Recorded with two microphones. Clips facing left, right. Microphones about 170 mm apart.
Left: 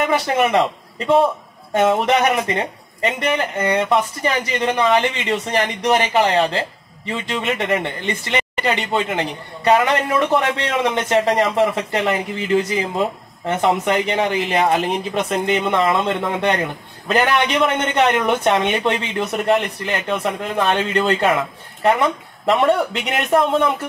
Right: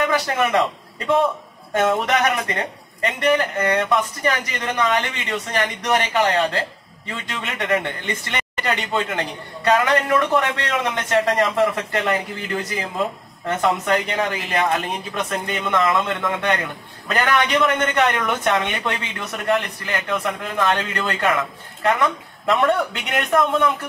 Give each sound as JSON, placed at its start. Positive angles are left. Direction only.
{"t": 0.0, "sound": "a man's voice", "side_deg": 25}
{"t": 13.5, "sound": "a man's voice", "side_deg": 20}